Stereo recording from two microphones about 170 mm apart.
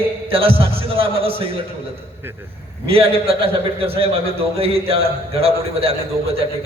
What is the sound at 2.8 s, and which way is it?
A man's voice, 35° right (ahead or behind).